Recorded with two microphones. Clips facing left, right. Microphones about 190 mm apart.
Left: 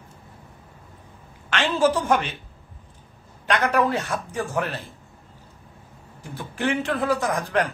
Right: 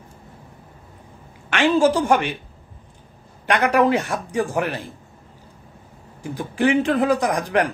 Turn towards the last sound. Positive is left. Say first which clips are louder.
# right 3 dB
turn(degrees=-15)  # may be behind; listen again after turning